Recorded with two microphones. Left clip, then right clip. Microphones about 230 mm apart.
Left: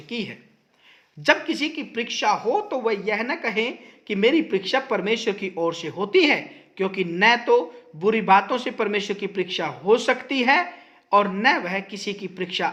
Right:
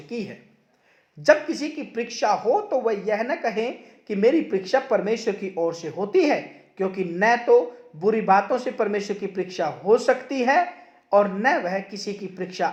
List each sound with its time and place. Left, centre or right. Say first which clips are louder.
0.1 s a man's voice: left 2 dB; left